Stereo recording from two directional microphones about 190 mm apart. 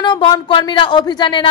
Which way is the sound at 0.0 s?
25° left (ahead or behind).